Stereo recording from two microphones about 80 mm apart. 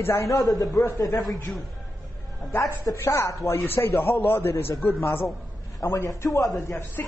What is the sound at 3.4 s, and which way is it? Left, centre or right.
A man's voice, left.